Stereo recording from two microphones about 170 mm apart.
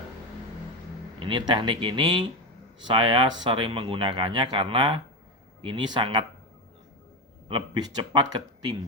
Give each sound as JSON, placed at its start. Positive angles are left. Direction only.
{"t": 1.2, "sound": "speech", "side_deg": -30}
{"t": 7.4, "sound": "speech", "side_deg": -30}